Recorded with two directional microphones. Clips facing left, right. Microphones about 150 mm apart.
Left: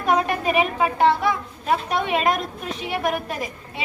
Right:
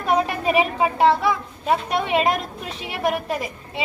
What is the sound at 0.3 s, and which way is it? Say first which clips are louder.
A woman's voice: right 1 dB; 30° right (ahead or behind).